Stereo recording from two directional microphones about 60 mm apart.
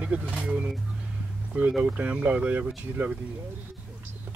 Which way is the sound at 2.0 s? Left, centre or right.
Right.